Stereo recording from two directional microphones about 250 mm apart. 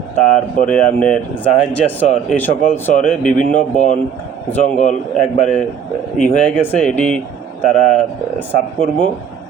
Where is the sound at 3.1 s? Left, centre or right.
Centre.